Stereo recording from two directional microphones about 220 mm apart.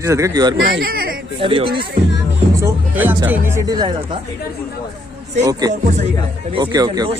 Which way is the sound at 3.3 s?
10° right (ahead or behind).